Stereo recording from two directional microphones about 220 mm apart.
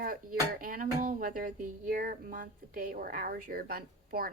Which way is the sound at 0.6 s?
40° right (ahead or behind).